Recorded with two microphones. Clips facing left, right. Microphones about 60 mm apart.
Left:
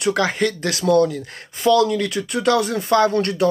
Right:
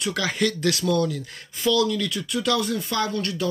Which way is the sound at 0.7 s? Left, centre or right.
Left.